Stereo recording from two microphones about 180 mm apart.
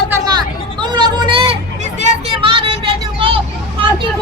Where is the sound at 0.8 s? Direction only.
25° right (ahead or behind).